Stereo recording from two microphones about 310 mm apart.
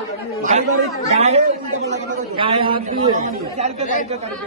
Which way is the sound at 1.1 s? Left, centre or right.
Centre.